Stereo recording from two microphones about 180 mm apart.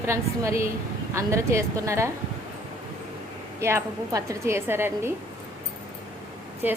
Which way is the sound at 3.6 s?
15° right (ahead or behind).